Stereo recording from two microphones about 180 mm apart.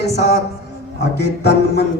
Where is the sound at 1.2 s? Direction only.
65° left (ahead or behind).